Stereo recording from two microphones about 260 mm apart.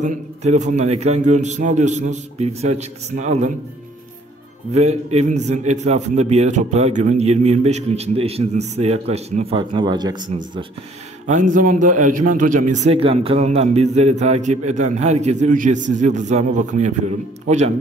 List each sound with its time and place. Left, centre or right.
0.0 s a man's voice: right
4.7 s a man's voice: right
11.2 s a man's voice: right